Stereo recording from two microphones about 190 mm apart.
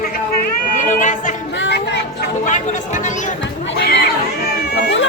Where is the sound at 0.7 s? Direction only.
40° left (ahead or behind).